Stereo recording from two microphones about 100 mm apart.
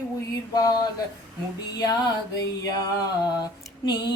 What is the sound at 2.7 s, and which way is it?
Female singing, 40° left (ahead or behind).